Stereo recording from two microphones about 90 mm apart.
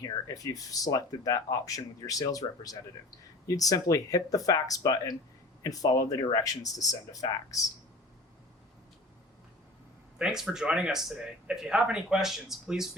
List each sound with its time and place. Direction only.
0.0 s speech: 45° left (ahead or behind)
10.2 s speech: 5° right (ahead or behind)